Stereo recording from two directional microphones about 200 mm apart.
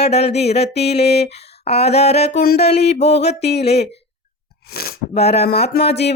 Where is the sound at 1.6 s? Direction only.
30° left (ahead or behind).